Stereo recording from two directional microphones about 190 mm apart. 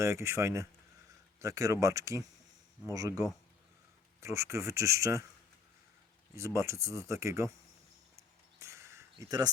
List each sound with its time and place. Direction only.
0.0 s speech: 15° right (ahead or behind)
6.3 s speech: 15° right (ahead or behind)
8.5 s a sound: 15° right (ahead or behind)